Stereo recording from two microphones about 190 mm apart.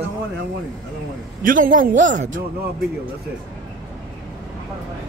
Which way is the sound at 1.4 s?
45° right (ahead or behind).